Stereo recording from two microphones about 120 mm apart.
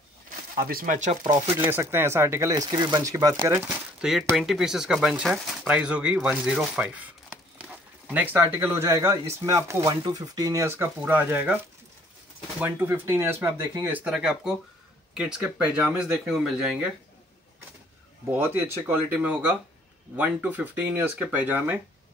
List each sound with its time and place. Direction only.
0.8 s speech: 90° right
1.7 s speech: 20° right (ahead or behind)
2.7 s speech: 35° right (ahead or behind)
4.0 s speech: 5° right (ahead or behind)
12.5 s speech: 15° right (ahead or behind)
18.3 s speech: 15° right (ahead or behind)